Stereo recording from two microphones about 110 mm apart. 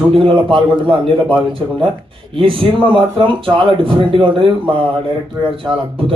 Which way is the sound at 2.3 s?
50° right (ahead or behind).